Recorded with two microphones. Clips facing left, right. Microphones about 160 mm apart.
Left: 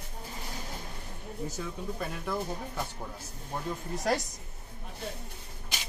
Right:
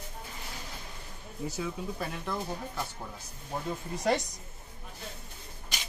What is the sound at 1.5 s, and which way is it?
Speech, 10° right (ahead or behind).